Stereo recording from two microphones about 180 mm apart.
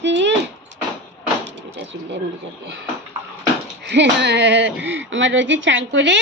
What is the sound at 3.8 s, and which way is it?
Speech, 75° right (ahead or behind).